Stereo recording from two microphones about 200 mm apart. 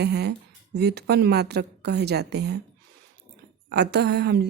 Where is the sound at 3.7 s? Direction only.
55° right (ahead or behind).